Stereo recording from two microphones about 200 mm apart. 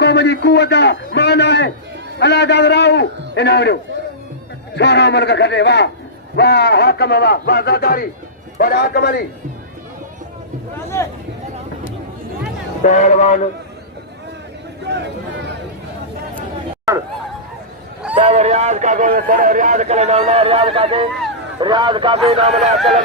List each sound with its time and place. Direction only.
0.0 s a man's voice: 55° left (ahead or behind)
4.8 s a man's voice: 60° left (ahead or behind)
12.8 s speech: 35° left (ahead or behind)
16.9 s fowl: 15° right (ahead or behind)
18.1 s speech: 30° right (ahead or behind)